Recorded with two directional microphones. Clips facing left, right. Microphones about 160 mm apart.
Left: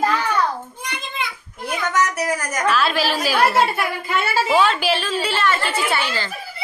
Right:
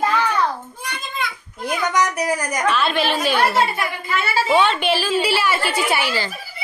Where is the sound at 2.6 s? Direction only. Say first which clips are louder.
Left 1 dB; centre (ahead or behind).